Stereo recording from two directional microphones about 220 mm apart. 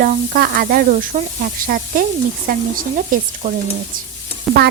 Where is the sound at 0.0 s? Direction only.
40° right (ahead or behind).